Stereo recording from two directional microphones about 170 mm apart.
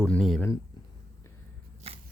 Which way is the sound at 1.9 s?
35° right (ahead or behind).